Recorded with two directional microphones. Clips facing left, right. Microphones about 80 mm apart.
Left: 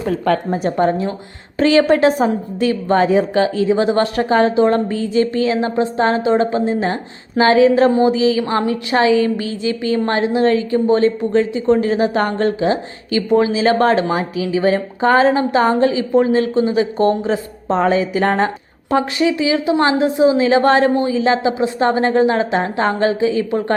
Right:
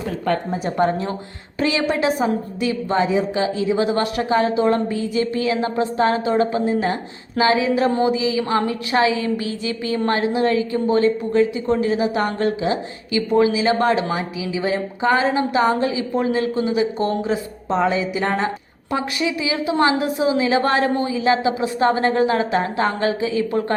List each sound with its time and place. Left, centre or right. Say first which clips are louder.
0.3 s a woman's voice: left 4 dB; left
0.8 s a woman's voice: left 2 dB; left
1.5 s a woman's voice: left 8 dB; left
3.7 s a woman's voice: left 4 dB; left
5.5 s a woman's voice: left 3 dB; left
6.9 s speech: left 4 dB; left
7.9 s a woman's voice: left 5 dB; left
10.1 s speech: left 3 dB; left
11.8 s a woman's voice: left 3 dB; left